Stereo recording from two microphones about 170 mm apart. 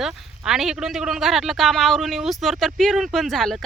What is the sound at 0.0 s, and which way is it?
Speech, 5° right (ahead or behind).